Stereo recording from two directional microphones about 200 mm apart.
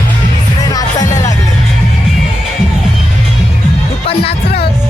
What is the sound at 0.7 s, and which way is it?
Music, 20° left (ahead or behind).